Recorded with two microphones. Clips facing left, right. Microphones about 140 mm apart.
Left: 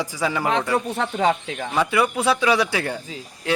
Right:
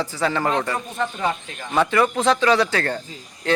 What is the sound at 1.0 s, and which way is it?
Speech, 90° left.